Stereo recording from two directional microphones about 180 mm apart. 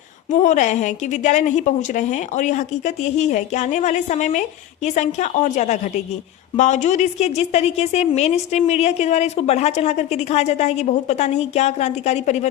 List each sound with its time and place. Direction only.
0.3 s a woman's voice: 45° left (ahead or behind)